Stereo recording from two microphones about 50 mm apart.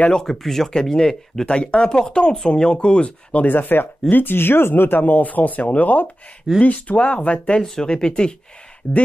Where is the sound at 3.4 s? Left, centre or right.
Left.